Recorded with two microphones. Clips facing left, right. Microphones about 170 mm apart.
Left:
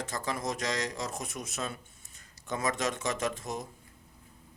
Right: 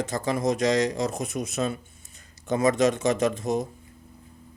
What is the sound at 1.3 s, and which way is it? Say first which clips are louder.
Speech: right 10 dB; 65° right (ahead or behind).